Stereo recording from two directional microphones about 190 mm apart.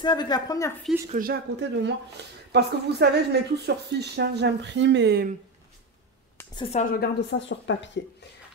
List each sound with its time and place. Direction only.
0.0 s a woman's voice: 20° left (ahead or behind)
1.1 s a woman's voice: 55° right (ahead or behind)
6.5 s a woman's voice: 25° left (ahead or behind)
6.8 s a woman's voice: 50° left (ahead or behind)
7.2 s speech: 70° left (ahead or behind)